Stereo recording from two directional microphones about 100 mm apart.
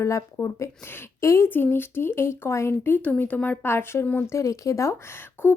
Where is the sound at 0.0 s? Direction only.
30° left (ahead or behind).